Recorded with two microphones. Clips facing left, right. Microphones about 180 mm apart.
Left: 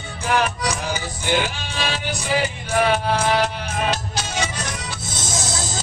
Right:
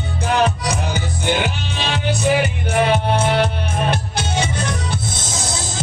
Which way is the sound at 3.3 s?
60° right (ahead or behind).